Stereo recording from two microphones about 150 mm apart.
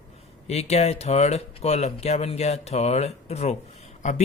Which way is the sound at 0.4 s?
45° left (ahead or behind).